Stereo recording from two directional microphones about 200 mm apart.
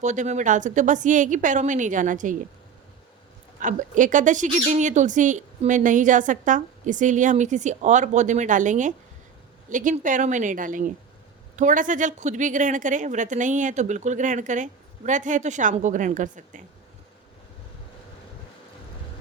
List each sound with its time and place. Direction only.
0.0 s speech: 35° right (ahead or behind)
3.6 s speech: 40° right (ahead or behind)